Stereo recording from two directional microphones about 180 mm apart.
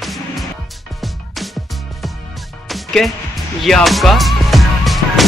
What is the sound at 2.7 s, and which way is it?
Music, centre (ahead or behind).